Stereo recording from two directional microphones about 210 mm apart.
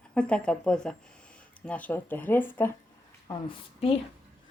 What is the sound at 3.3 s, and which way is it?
Speech, 25° left (ahead or behind).